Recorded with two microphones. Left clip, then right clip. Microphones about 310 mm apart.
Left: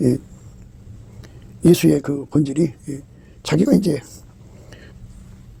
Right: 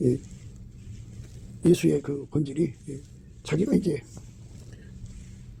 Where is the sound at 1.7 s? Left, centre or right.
Left.